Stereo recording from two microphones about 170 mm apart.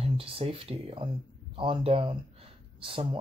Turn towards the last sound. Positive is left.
turn(degrees=-30)  # may be behind; listen again after turning